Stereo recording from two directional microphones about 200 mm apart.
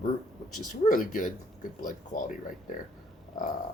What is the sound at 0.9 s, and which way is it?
Speech, 40° left (ahead or behind).